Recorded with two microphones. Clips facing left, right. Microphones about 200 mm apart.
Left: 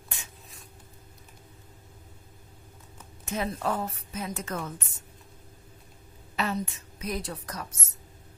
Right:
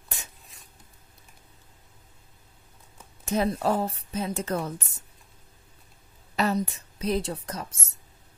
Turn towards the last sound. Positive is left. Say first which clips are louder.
# right 3 dB
turn(degrees=-25)  # may be behind; listen again after turning